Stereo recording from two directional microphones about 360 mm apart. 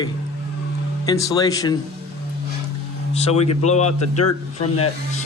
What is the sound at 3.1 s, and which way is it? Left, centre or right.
Speech, centre.